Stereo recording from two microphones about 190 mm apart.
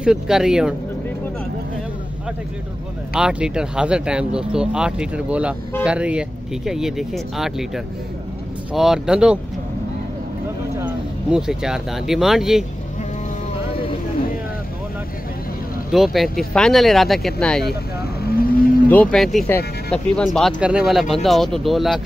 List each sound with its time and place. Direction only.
0.0 s speech: 5° right (ahead or behind)
3.1 s speech: 5° right (ahead or behind)
10.8 s speech: 5° right (ahead or behind)
15.9 s speech: centre (ahead or behind)
18.2 s whale vocalization: 50° left (ahead or behind)
18.9 s speech: 5° left (ahead or behind)